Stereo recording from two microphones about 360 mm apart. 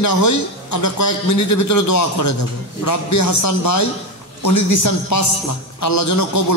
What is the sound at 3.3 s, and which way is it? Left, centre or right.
A man's voice, left.